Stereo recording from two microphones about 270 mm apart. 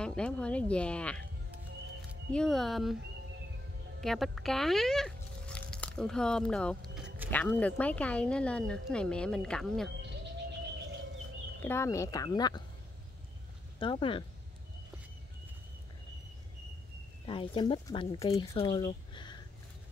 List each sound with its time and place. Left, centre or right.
0.0 s speech: centre
2.3 s speech: centre
4.0 s speech: centre
11.6 s speech: centre
13.7 s speech: centre
17.3 s speech: centre